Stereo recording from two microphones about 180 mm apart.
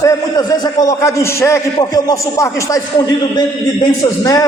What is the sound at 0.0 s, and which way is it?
A man's voice, 20° left (ahead or behind).